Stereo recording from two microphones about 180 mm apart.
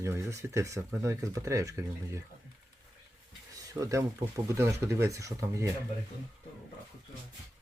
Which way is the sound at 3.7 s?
20° right (ahead or behind).